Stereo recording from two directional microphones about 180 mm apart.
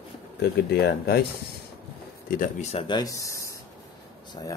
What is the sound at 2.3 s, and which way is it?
Speech, 50° left (ahead or behind).